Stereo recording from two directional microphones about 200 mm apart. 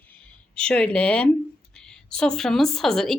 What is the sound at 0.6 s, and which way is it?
Speech, 5° left (ahead or behind).